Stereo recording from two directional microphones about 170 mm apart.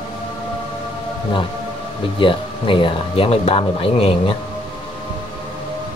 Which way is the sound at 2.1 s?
30° left (ahead or behind).